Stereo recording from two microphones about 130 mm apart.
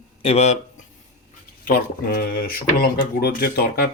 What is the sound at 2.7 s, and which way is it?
Speech, 90° left.